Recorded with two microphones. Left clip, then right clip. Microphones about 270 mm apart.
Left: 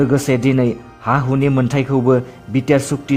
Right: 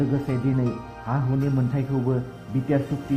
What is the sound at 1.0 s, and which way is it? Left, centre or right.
Speech, left.